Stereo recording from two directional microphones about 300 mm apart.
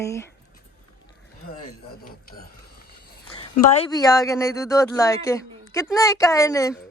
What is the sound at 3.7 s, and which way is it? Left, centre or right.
Speech, centre.